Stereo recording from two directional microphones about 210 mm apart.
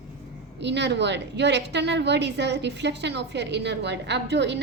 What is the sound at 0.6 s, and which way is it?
A woman's voice, 55° right (ahead or behind).